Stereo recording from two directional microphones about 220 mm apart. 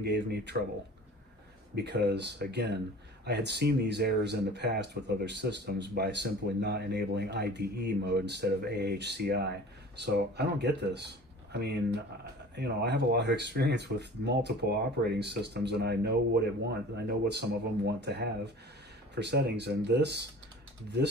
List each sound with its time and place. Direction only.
0.0 s speech: 50° right (ahead or behind)
1.8 s speech: 50° right (ahead or behind)